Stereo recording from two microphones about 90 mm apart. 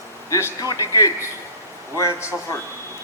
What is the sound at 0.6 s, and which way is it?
Speech, 40° left (ahead or behind).